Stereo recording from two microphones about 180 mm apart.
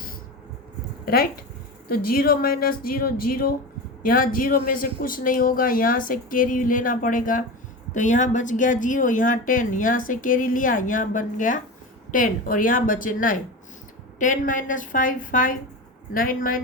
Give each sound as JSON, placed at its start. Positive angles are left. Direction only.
{"t": 1.0, "sound": "speech", "side_deg": 55}